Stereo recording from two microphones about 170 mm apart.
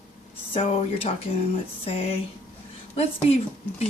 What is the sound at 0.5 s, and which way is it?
Speech, 30° left (ahead or behind).